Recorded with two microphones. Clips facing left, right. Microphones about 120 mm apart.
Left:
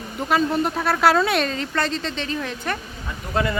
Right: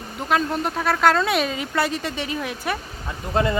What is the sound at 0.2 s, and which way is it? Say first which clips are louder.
A woman's voice: left 2 dB; centre (ahead or behind).